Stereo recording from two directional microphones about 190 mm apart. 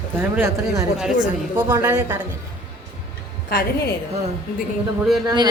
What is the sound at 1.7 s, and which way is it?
Speech, 20° right (ahead or behind).